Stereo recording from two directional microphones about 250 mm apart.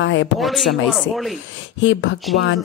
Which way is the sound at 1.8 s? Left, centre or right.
Left.